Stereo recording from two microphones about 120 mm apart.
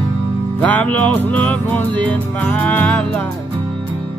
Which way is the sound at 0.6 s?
10° left (ahead or behind).